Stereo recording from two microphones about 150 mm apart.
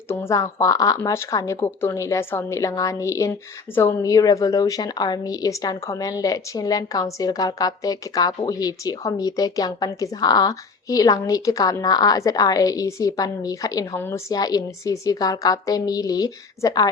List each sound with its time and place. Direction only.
0.1 s a woman's voice: 15° left (ahead or behind)